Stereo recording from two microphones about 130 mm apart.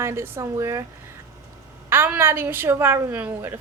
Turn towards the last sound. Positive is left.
turn(degrees=-15)  # may be behind; listen again after turning